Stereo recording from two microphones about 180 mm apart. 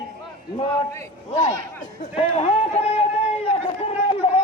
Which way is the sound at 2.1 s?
35° left (ahead or behind).